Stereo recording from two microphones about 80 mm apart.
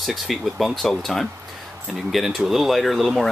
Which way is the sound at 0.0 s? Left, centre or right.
Centre.